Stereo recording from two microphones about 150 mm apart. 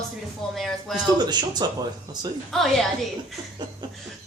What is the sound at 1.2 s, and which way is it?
Speech, 25° right (ahead or behind).